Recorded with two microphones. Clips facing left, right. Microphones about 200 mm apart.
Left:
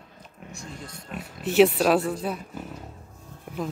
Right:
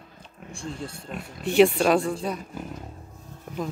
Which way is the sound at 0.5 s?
30° right (ahead or behind).